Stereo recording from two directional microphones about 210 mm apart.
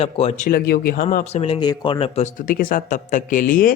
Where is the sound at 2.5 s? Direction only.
40° left (ahead or behind).